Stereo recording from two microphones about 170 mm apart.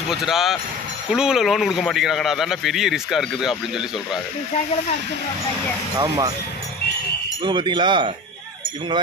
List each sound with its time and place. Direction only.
0.1 s speech: centre (ahead or behind)
5.9 s speech: 25° right (ahead or behind)
7.4 s speech: 25° right (ahead or behind)